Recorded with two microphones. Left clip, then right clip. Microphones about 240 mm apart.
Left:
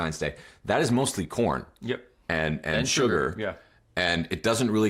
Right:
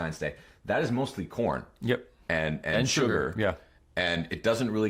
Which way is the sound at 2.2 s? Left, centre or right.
Centre.